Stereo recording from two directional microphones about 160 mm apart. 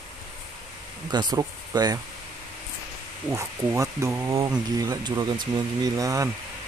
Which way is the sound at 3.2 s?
20° right (ahead or behind).